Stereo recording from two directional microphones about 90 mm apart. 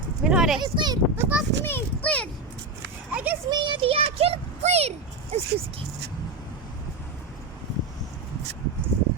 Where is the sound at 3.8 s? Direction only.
90° right.